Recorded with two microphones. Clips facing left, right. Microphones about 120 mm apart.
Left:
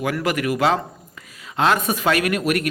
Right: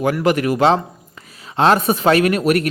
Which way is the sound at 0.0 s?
30° right (ahead or behind).